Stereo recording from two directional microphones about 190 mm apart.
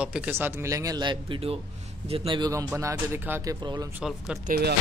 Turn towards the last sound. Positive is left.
turn(degrees=-50)  # may be behind; listen again after turning